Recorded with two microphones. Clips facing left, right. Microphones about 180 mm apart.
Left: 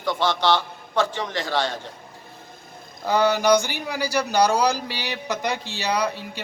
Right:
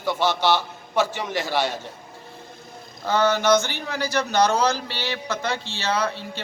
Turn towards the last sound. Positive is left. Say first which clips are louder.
# left 1 dB
turn(degrees=15)  # may be behind; listen again after turning